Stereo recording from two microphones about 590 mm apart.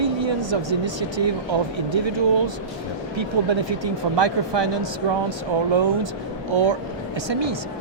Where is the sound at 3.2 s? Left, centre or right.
Right.